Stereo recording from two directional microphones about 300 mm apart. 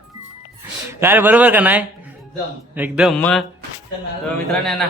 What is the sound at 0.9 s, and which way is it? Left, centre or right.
A man's voice, centre.